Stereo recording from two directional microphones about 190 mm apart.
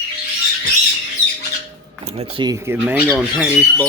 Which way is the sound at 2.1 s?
25° right (ahead or behind).